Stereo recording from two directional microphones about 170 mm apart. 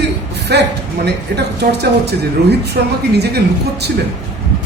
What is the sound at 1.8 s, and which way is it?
Speech, 75° right (ahead or behind).